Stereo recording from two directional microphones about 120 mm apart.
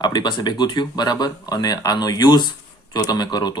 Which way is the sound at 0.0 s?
35° left (ahead or behind).